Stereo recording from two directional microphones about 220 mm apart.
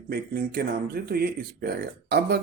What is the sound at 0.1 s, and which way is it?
Speech, 45° right (ahead or behind).